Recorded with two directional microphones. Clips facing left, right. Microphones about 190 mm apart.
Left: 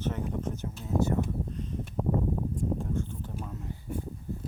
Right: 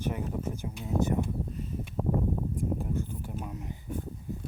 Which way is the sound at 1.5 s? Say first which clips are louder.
Left 1 dB; 5° right (ahead or behind).